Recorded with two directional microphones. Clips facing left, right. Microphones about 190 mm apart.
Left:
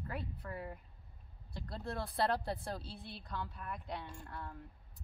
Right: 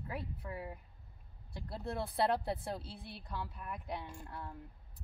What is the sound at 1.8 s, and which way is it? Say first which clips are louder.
Speech: right 2 dB; 25° right (ahead or behind).